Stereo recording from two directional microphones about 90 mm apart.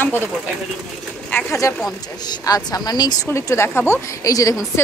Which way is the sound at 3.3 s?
30° left (ahead or behind).